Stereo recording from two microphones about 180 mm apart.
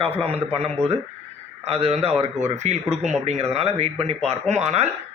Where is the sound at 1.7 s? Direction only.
35° right (ahead or behind).